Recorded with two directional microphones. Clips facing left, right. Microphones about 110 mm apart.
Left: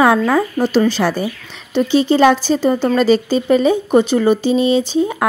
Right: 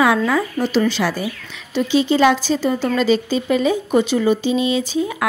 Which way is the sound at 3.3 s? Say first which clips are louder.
Left 4 dB; 40° left (ahead or behind).